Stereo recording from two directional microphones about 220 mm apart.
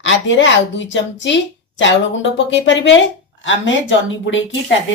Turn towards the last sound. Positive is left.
turn(degrees=60)  # may be behind; listen again after turning